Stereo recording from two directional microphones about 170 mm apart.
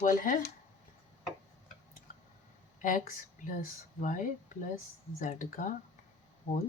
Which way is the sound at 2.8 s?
50° left (ahead or behind).